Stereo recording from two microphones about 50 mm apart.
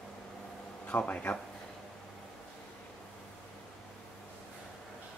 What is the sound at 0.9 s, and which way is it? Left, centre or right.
Speech, left.